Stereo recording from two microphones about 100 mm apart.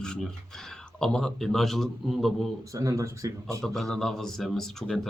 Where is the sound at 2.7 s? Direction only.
35° right (ahead or behind).